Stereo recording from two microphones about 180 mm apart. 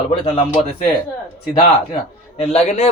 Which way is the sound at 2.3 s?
35° left (ahead or behind).